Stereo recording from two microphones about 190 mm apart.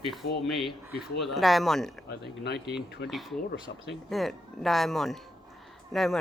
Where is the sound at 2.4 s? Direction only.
60° left (ahead or behind).